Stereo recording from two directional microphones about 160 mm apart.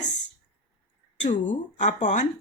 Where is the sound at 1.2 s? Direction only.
50° left (ahead or behind).